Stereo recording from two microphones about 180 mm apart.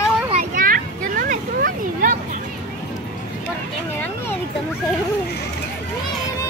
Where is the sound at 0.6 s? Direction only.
50° right (ahead or behind).